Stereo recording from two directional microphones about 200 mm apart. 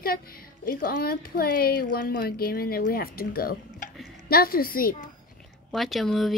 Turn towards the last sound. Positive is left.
turn(degrees=0)  # may be behind; listen again after turning